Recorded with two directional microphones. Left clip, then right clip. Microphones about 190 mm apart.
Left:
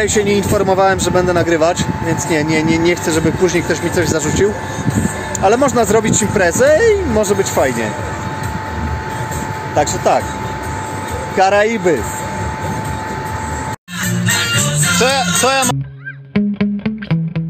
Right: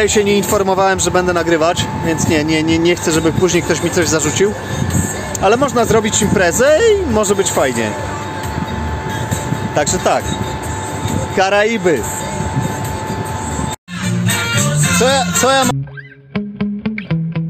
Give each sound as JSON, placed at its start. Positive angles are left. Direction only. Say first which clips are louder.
{"t": 0.0, "sound": "speech", "louder": "right 1 dB", "side_deg": -5}
{"t": 3.4, "sound": "speech", "louder": "even", "side_deg": -20}
{"t": 3.9, "sound": "speech", "louder": "right 1 dB", "side_deg": -5}
{"t": 9.8, "sound": "speech", "louder": "left 1 dB", "side_deg": -5}
{"t": 11.3, "sound": "speech", "louder": "left 1 dB", "side_deg": -5}
{"t": 15.0, "sound": "music", "louder": "right 1 dB", "side_deg": -10}